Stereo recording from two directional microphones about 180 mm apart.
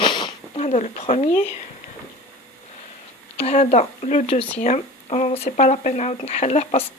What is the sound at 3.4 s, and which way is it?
Speech, 35° left (ahead or behind).